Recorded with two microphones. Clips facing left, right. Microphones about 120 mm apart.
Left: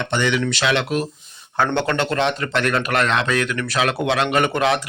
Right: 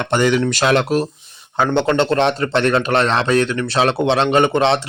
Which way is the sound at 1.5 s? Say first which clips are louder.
Right 4 dB; 20° right (ahead or behind).